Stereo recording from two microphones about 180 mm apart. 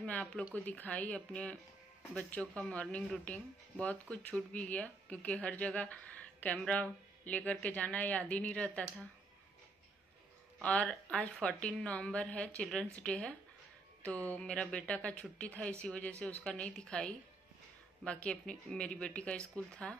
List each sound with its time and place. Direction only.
0.0 s a sound: 5° left (ahead or behind)
0.7 s speech: 10° left (ahead or behind)
10.6 s speech: 5° left (ahead or behind)